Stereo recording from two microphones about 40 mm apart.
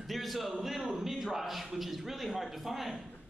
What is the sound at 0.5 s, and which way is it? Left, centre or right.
A man's voice, centre.